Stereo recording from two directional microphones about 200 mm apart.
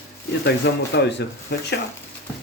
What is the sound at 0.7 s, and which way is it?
Speech, 55° left (ahead or behind).